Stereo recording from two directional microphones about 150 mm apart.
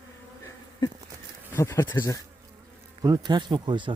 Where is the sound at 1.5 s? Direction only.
20° left (ahead or behind).